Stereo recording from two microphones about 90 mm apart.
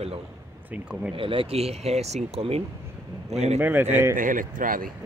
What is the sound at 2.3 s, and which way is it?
Speech, 90° right.